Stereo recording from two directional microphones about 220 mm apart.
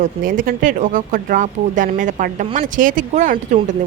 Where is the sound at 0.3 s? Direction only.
40° right (ahead or behind).